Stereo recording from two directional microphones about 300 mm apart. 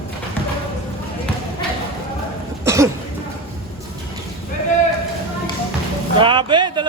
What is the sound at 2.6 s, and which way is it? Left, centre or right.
Cough, centre.